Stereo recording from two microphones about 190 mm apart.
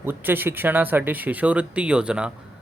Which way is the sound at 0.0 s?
10° right (ahead or behind).